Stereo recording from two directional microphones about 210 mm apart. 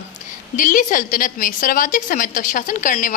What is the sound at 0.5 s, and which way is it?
A woman's voice, 40° left (ahead or behind).